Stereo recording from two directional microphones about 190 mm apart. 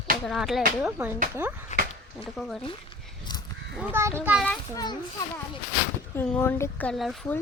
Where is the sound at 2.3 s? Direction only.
Centre (ahead or behind).